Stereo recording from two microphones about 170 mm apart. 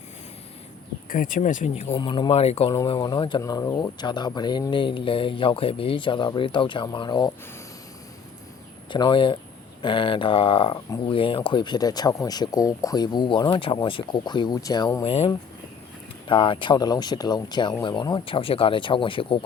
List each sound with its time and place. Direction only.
1.1 s speech: 50° left (ahead or behind)
1.9 s speech: 25° left (ahead or behind)
8.9 s speech: 25° left (ahead or behind)
15.0 s speech: 35° left (ahead or behind)
16.3 s speech: 30° left (ahead or behind)